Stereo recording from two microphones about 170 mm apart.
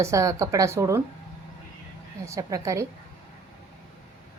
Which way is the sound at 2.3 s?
20° right (ahead or behind).